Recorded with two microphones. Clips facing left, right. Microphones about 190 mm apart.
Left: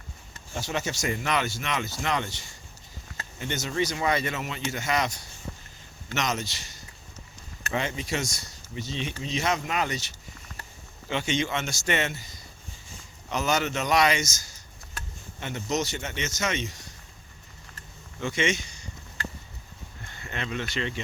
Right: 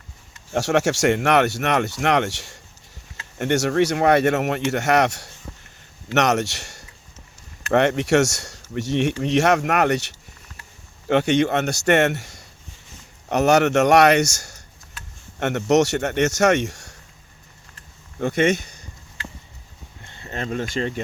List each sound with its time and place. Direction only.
0.5 s speech: 80° right
18.2 s a man's voice: 55° right (ahead or behind)
20.1 s speech: 30° right (ahead or behind)